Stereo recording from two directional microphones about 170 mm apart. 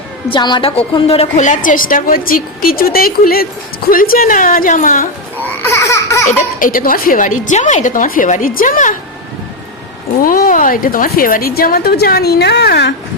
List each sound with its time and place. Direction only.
0.3 s a woman's voice: 25° left (ahead or behind); by 5.0 s 50° left (ahead or behind)
5.4 s a sound: 15° left (ahead or behind)
6.2 s a woman's voice: 55° left (ahead or behind)
10.2 s a woman's voice: 55° left (ahead or behind); by 12.9 s 80° left